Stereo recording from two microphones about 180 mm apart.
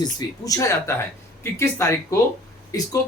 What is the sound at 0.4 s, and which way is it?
Speech, 20° left (ahead or behind).